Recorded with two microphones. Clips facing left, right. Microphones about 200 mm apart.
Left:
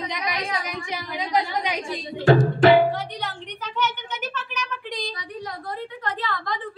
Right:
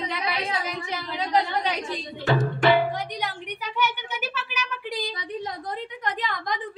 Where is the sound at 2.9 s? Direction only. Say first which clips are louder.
Even; 15° right (ahead or behind).